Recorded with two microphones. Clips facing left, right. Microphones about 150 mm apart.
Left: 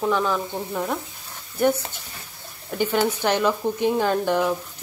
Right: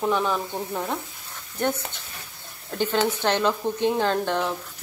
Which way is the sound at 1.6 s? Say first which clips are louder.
Left 5 dB; 10° left (ahead or behind).